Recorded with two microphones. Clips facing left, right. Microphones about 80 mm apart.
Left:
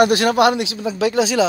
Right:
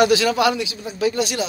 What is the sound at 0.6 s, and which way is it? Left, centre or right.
Speech, left.